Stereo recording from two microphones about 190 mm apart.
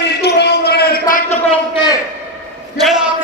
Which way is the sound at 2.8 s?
Centre (ahead or behind).